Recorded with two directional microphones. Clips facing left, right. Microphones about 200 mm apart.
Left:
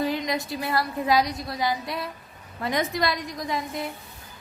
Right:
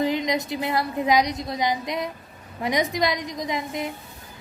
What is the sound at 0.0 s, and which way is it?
A woman's voice, 20° right (ahead or behind).